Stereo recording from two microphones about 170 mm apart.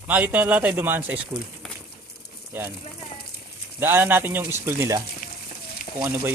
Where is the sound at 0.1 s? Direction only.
10° right (ahead or behind).